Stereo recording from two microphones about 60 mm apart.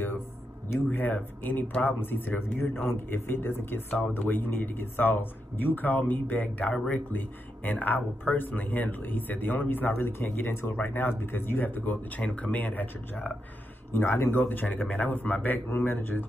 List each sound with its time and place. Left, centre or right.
0.7 s speech: left
13.9 s speech: left